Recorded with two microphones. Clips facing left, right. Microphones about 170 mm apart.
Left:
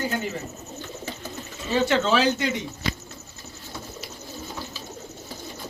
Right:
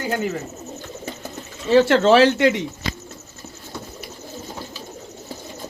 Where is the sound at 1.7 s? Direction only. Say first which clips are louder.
Right 8 dB; 80° right.